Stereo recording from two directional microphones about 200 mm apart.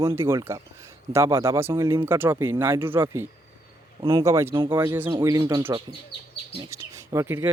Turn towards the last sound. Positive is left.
turn(degrees=-10)  # may be behind; listen again after turning